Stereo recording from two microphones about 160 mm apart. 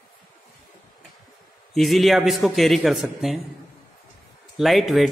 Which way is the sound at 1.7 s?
Centre (ahead or behind).